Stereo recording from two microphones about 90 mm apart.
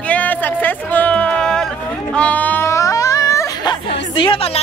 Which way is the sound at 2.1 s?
15° left (ahead or behind).